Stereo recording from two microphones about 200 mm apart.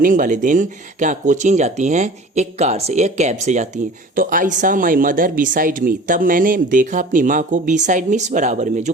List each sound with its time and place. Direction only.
0.0 s speech: 40° right (ahead or behind)